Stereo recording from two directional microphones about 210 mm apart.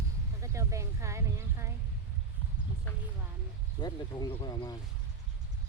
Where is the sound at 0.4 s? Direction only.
15° right (ahead or behind).